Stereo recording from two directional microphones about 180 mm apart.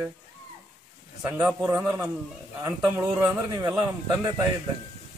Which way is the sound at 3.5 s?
20° right (ahead or behind).